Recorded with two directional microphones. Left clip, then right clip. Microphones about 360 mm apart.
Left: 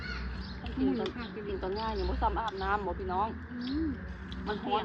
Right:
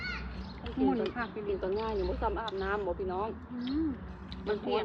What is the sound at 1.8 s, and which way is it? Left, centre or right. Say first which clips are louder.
Speech: even; centre.